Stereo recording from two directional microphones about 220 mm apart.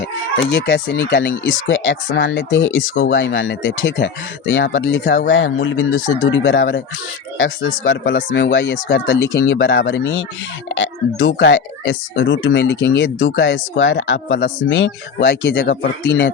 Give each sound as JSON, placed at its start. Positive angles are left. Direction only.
{"t": 0.3, "sound": "speech", "side_deg": 55}